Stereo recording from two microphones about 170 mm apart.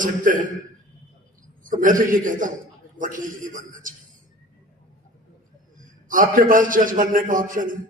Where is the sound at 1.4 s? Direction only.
50° right (ahead or behind).